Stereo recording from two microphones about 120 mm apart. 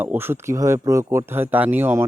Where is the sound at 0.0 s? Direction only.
15° right (ahead or behind).